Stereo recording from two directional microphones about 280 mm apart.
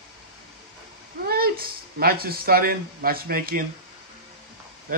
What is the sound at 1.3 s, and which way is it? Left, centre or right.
Speech, right.